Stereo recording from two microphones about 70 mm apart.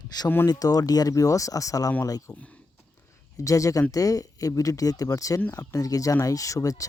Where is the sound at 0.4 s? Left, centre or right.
Left.